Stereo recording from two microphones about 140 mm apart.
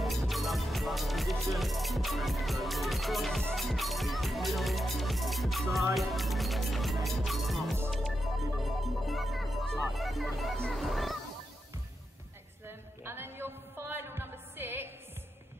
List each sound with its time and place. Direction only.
0.0 s music: centre (ahead or behind)
5.9 s speech: centre (ahead or behind)
7.9 s music: centre (ahead or behind)
12.6 s music: 15° right (ahead or behind)